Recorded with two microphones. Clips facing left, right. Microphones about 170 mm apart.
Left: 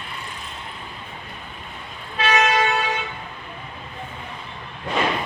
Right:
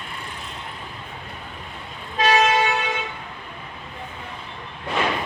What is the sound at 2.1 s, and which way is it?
Toot, 40° right (ahead or behind).